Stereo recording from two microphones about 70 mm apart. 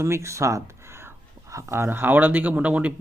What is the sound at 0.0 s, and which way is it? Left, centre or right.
Speech, right.